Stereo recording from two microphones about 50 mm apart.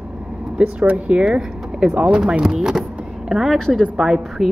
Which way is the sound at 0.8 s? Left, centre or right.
Right.